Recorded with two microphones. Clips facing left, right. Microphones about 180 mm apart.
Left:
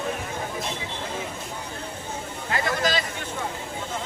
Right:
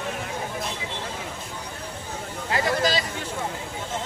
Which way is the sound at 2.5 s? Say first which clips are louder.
Right 2 dB; 35° right (ahead or behind).